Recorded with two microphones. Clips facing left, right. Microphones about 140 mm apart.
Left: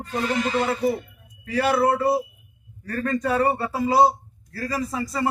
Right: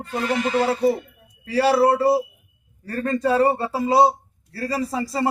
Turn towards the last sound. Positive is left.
turn(degrees=-30)  # may be behind; listen again after turning